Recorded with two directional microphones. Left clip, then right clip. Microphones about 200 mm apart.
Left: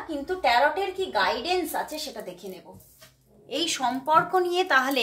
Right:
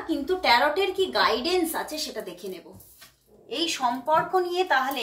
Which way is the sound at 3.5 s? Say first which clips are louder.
Right 1 dB; 30° left (ahead or behind).